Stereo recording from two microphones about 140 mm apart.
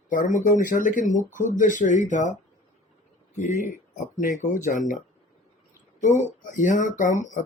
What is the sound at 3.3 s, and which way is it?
Speech, 60° left (ahead or behind).